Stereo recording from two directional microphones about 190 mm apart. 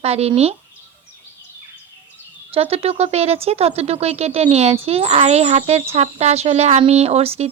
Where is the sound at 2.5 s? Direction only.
30° right (ahead or behind).